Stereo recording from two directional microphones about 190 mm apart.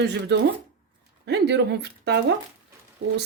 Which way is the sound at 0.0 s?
60° right (ahead or behind).